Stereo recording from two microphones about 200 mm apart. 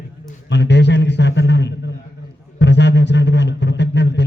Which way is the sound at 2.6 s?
60° left (ahead or behind).